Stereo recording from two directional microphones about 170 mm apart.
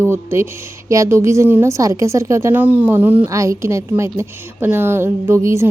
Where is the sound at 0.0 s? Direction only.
15° right (ahead or behind).